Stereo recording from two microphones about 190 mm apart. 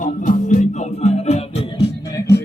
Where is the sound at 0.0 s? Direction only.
40° left (ahead or behind).